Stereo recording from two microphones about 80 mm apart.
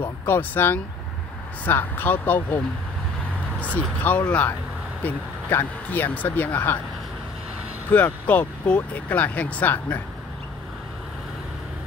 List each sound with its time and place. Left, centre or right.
0.0 s speech: left
4.1 s speech: left
7.9 s speech: centre